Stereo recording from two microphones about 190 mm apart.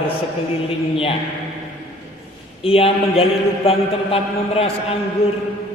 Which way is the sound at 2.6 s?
30° left (ahead or behind).